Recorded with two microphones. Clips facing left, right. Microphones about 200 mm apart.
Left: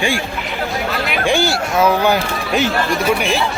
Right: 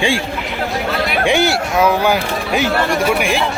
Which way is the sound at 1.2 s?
20° right (ahead or behind).